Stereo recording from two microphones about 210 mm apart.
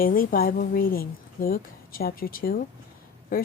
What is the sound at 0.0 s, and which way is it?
A woman's voice, 40° left (ahead or behind).